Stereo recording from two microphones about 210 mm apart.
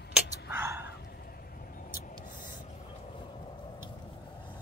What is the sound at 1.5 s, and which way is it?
Vehicle, 40° left (ahead or behind).